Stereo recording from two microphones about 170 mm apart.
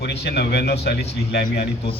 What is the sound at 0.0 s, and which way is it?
A man's voice, 75° left (ahead or behind).